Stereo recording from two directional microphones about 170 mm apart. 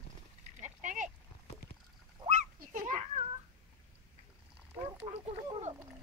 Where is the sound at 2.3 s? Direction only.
45° right (ahead or behind).